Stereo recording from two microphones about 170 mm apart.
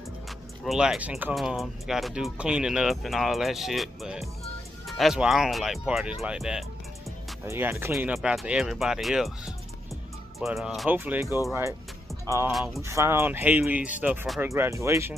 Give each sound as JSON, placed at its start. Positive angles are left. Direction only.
{"t": 0.7, "sound": "speech", "side_deg": -5}
{"t": 7.4, "sound": "speech", "side_deg": -15}
{"t": 10.4, "sound": "speech", "side_deg": 0}
{"t": 12.4, "sound": "speech", "side_deg": 0}
{"t": 12.8, "sound": "speech", "side_deg": -15}
{"t": 14.4, "sound": "speech", "side_deg": -15}